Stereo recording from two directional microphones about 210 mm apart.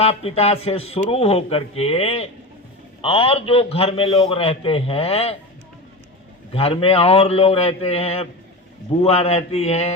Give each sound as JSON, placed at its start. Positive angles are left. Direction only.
{"t": 0.0, "sound": "a man's voice", "side_deg": 30}
{"t": 6.5, "sound": "a man's voice", "side_deg": 25}